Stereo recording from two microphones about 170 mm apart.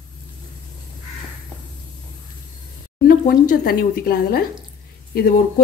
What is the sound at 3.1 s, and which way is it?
Speech, 60° left (ahead or behind).